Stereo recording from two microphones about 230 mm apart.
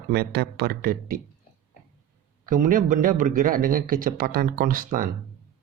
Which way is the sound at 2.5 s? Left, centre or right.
Right.